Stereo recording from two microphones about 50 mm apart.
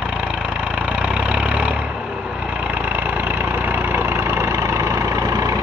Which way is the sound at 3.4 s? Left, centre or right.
Right.